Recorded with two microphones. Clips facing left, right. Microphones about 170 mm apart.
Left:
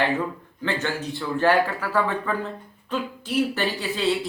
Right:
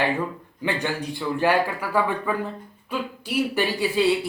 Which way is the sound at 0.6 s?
15° right (ahead or behind).